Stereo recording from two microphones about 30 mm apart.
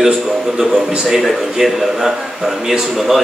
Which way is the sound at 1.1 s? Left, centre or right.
Centre.